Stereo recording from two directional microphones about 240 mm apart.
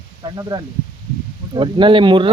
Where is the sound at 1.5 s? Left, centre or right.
Centre.